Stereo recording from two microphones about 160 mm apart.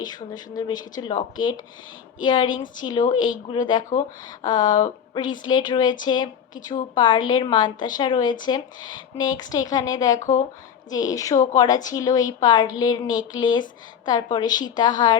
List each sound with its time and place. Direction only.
0.3 s a woman's voice: 25° left (ahead or behind)